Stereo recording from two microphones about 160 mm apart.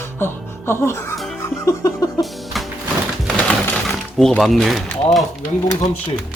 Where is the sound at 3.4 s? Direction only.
5° left (ahead or behind).